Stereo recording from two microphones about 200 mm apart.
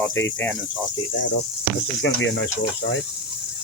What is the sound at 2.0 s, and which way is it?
Speech, 65° left (ahead or behind).